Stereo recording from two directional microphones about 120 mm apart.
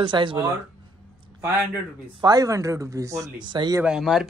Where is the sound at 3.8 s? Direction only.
5° right (ahead or behind).